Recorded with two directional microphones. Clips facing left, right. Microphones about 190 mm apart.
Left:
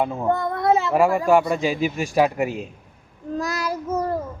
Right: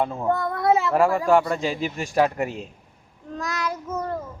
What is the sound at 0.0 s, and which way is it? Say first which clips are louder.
Speech: left 2 dB; 5° left (ahead or behind).